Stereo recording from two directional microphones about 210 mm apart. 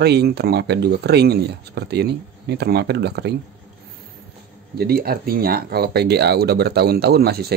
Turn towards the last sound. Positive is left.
turn(degrees=-50)  # may be behind; listen again after turning